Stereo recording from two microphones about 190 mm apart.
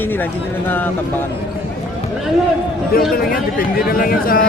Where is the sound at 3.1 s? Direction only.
50° left (ahead or behind).